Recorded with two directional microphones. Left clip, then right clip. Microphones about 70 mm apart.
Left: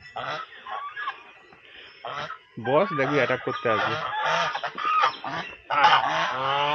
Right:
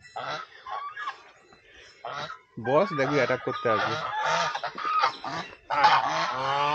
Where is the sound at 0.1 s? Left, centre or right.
Centre.